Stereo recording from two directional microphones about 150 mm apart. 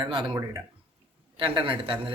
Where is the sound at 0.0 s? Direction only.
30° right (ahead or behind).